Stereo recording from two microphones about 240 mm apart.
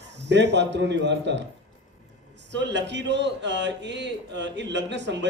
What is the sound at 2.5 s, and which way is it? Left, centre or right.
A man's voice, right.